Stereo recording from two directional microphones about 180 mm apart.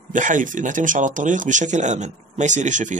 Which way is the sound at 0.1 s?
45° right (ahead or behind).